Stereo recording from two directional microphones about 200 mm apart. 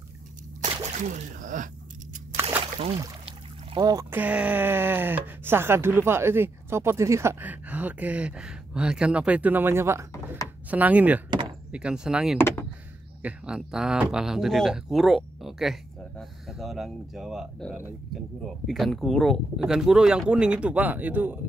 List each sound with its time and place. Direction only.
0.9 s speech: 35° right (ahead or behind)
3.7 s speech: 20° right (ahead or behind)
11.2 s door: 25° right (ahead or behind)
11.7 s speech: 5° right (ahead or behind)
12.4 s speech: 10° left (ahead or behind)
13.2 s speech: 5° right (ahead or behind)